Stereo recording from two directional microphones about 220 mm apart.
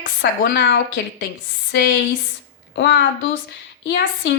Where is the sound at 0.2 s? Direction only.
50° left (ahead or behind).